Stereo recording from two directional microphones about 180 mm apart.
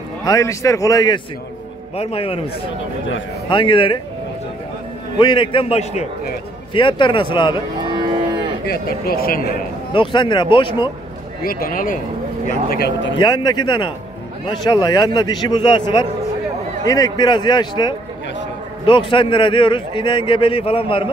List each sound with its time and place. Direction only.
0.2 s a man's voice: 20° left (ahead or behind)
2.0 s a man's voice: 35° left (ahead or behind)
3.4 s a man's voice: 25° left (ahead or behind)
5.1 s a man's voice: 25° left (ahead or behind)
7.8 s cattle: 25° right (ahead or behind)
8.6 s speech: 60° left (ahead or behind)
9.9 s a man's voice: 25° left (ahead or behind)
11.4 s speech: 50° left (ahead or behind); by 13.2 s 75° left (ahead or behind)
13.2 s a man's voice: 25° left (ahead or behind)